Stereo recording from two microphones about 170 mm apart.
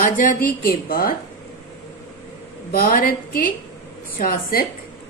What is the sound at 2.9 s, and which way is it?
A woman's voice, 55° left (ahead or behind).